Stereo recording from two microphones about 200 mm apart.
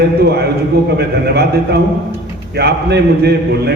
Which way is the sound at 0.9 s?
55° right (ahead or behind).